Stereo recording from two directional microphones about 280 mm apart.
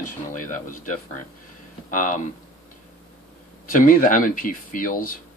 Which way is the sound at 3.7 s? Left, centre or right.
Left.